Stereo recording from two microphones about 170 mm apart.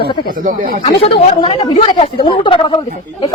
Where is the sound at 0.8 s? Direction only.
35° left (ahead or behind).